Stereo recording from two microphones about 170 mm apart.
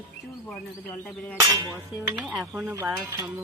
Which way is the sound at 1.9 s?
10° right (ahead or behind).